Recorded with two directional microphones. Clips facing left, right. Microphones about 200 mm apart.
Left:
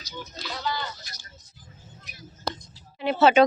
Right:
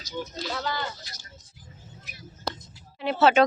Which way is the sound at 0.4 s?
45° right (ahead or behind).